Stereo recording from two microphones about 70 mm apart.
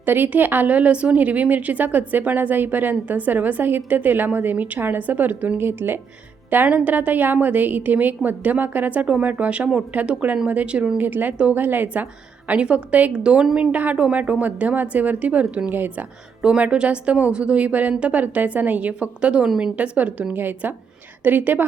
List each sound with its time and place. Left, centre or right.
0.0 s a woman's voice: right
12.5 s a woman's voice: centre
16.4 s a woman's voice: centre